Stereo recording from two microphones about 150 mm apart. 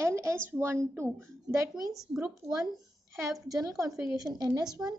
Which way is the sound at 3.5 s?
20° right (ahead or behind).